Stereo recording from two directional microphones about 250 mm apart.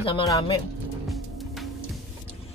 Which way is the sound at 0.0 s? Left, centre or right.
Centre.